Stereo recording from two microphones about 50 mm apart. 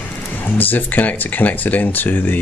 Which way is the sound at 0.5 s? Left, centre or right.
Left.